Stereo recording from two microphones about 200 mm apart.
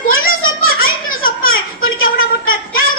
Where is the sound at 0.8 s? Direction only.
45° left (ahead or behind).